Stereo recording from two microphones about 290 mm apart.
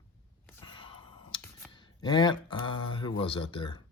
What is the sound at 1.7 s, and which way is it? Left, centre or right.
Speech, centre.